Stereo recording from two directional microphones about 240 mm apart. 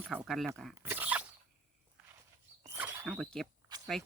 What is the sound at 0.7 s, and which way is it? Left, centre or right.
Dog, centre.